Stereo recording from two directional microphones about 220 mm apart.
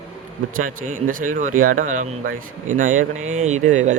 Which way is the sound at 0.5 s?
40° right (ahead or behind).